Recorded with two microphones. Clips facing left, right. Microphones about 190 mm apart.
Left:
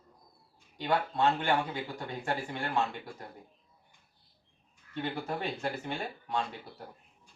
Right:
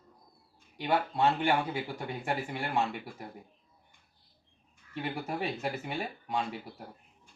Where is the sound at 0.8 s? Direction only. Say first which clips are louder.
Right 1 dB; 10° right (ahead or behind).